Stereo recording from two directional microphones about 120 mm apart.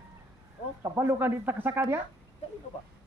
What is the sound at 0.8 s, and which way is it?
Speech, 25° right (ahead or behind).